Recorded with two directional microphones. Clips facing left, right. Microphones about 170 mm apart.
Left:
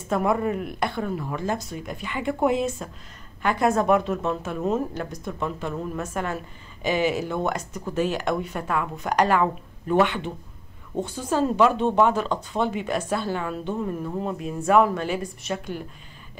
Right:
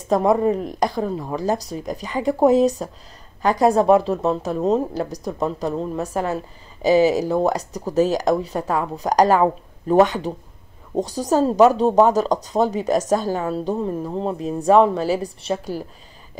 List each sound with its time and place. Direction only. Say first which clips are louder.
0.1 s a woman's voice: right 6 dB; 35° right (ahead or behind)